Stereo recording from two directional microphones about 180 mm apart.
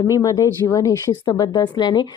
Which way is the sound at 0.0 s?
15° left (ahead or behind).